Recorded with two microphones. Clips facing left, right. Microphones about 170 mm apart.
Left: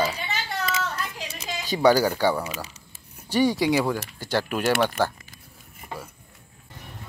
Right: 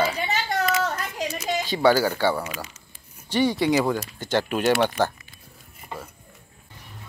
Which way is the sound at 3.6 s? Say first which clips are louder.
Right 1 dB; 5° left (ahead or behind).